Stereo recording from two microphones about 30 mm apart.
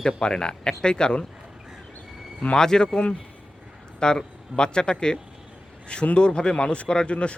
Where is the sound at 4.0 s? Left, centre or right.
Left.